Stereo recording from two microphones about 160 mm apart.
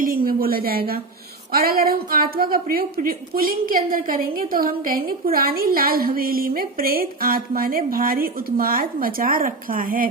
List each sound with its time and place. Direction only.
0.0 s a woman's voice: 60° right (ahead or behind)